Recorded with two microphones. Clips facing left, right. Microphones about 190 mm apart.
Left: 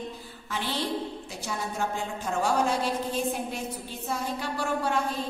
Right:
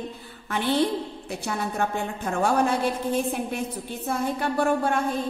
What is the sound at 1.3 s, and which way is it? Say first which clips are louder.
A woman's voice: right 5 dB; 60° right (ahead or behind).